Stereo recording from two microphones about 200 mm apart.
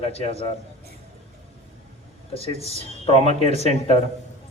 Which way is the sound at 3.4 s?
35° right (ahead or behind).